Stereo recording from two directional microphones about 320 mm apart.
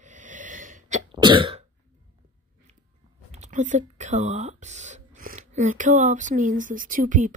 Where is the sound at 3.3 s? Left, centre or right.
Right.